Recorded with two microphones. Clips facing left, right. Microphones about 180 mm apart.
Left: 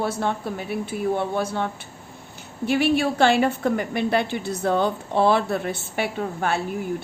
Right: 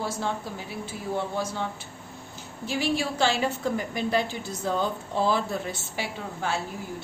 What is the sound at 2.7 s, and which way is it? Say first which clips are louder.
A woman's voice: left 7 dB; 60° left (ahead or behind).